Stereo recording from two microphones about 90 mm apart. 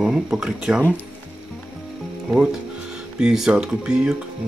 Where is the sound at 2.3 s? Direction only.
5° right (ahead or behind).